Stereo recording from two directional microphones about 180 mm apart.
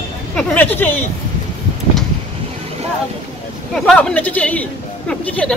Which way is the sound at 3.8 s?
5° left (ahead or behind).